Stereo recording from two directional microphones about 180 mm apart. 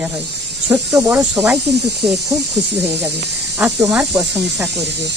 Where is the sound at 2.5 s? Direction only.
70° right (ahead or behind).